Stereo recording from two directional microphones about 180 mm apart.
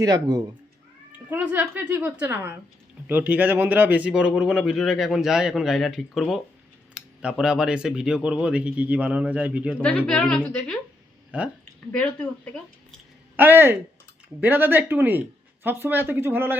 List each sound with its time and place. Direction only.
0.0 s a woman's voice: 20° right (ahead or behind)
10.1 s speech: 5° left (ahead or behind)
11.3 s a woman's voice: 5° right (ahead or behind)
13.3 s a woman's voice: 10° right (ahead or behind)